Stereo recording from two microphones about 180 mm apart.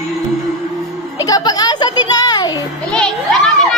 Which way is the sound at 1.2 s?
20° left (ahead or behind).